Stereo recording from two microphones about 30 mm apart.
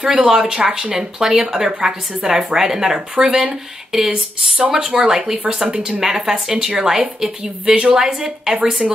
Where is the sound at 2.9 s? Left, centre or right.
Right.